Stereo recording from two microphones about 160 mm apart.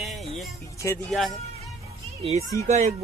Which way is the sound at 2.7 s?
45° right (ahead or behind).